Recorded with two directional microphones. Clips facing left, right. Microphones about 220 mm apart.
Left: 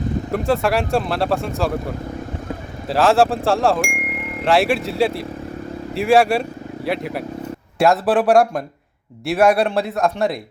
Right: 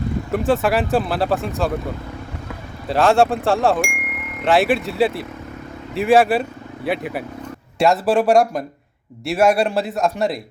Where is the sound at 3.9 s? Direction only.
30° left (ahead or behind).